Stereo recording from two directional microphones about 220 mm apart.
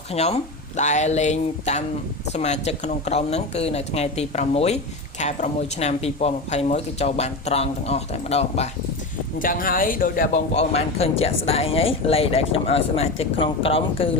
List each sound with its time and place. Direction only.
0.1 s speech: 30° left (ahead or behind)
0.8 s a sound: 30° left (ahead or behind)
2.3 s speech: 30° left (ahead or behind)
9.4 s speech: 40° left (ahead or behind)